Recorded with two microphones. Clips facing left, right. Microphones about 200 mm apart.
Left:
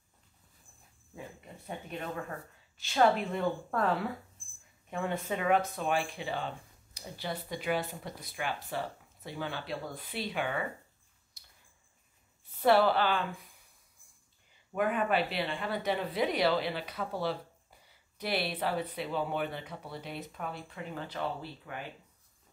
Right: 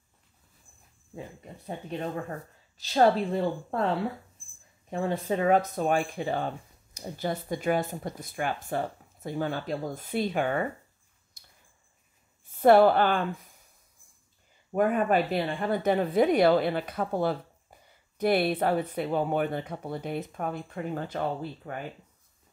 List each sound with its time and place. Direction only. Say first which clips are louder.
1.7 s speech: right 5 dB; 30° right (ahead or behind); by 10.7 s 45° right (ahead or behind)
11.4 s a sound: right 4 dB; 50° right (ahead or behind)
12.5 s a woman's voice: right 6 dB; 50° right (ahead or behind)
14.7 s speech: right 5 dB; 45° right (ahead or behind)